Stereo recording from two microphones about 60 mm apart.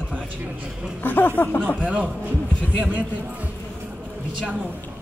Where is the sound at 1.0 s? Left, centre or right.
Left.